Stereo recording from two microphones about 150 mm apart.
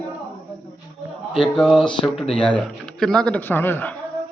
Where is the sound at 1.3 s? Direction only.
35° left (ahead or behind).